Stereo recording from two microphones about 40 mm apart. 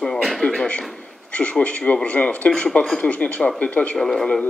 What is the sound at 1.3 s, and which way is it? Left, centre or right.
Speech, left.